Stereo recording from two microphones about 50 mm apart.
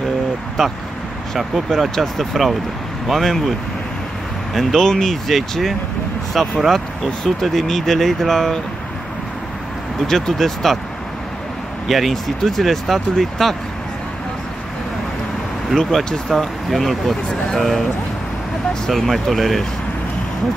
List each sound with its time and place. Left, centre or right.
0.6 s speech: centre
4.6 s speech: centre
10.0 s speech: centre
11.9 s speech: centre
15.7 s speech: centre
18.9 s speech: centre